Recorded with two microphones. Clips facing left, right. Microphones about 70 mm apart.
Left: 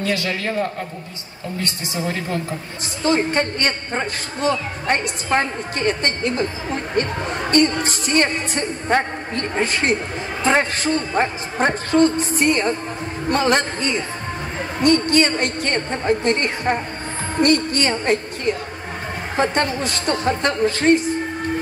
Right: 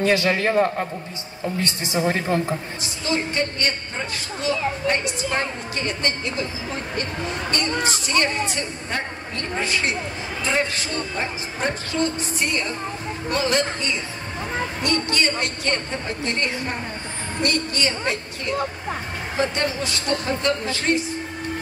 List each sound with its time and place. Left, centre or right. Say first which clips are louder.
0.0 s a man's voice: right 3 dB; right
2.0 s a woman's voice: right 3 dB; right
3.0 s a woman's voice: left 5 dB; left
7.5 s a woman's voice: left 8 dB; left
19.5 s speech: left 4 dB; left